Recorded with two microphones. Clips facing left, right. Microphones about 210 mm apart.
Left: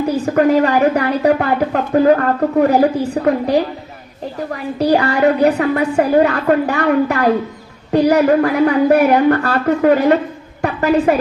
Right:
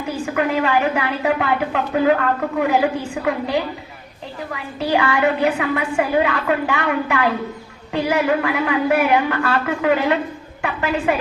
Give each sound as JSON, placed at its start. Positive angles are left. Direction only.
{"t": 0.0, "sound": "a woman's voice", "side_deg": 40}